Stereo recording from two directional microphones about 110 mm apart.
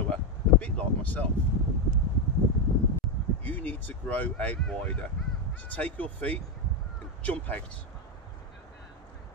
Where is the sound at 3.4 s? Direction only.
15° left (ahead or behind).